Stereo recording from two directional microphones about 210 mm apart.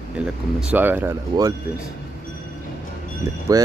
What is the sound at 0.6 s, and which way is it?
Speech, 5° right (ahead or behind).